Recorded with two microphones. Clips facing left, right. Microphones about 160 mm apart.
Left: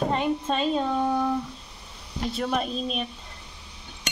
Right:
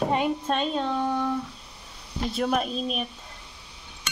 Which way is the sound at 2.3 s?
5° right (ahead or behind).